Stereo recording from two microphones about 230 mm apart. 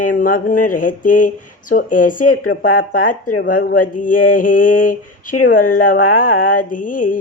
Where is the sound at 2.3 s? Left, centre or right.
Left.